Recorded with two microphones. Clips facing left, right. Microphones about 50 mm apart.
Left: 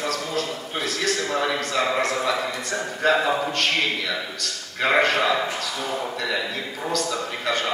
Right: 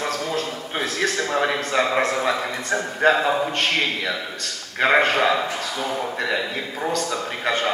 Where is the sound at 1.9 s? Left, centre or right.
Right.